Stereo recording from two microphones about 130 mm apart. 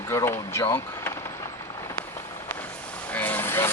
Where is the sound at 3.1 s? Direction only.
15° left (ahead or behind).